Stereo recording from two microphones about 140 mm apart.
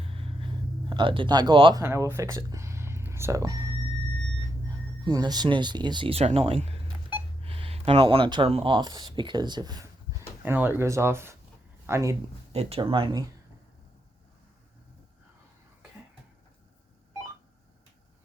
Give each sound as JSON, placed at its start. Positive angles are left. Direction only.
{"t": 0.0, "sound": "a sound", "side_deg": -40}
{"t": 1.7, "sound": "speech", "side_deg": -20}
{"t": 5.0, "sound": "speech", "side_deg": -30}
{"t": 10.4, "sound": "speech", "side_deg": -15}
{"t": 12.5, "sound": "speech", "side_deg": -45}